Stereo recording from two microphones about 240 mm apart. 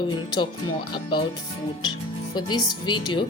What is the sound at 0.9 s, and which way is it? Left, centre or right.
Speech, centre.